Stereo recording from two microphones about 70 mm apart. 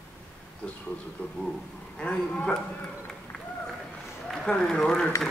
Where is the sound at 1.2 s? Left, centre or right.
Left.